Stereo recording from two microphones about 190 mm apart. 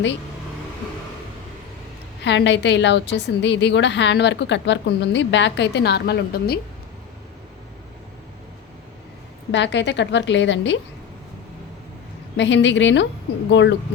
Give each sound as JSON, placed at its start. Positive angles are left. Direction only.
{"t": 2.2, "sound": "a woman's voice", "side_deg": 65}
{"t": 9.5, "sound": "a woman's voice", "side_deg": 65}
{"t": 12.4, "sound": "a woman's voice", "side_deg": 70}